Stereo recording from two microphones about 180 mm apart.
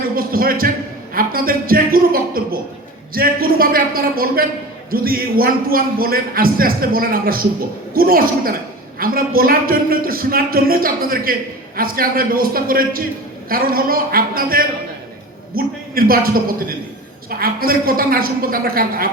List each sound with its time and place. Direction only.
0.2 s a man's voice: 55° right (ahead or behind)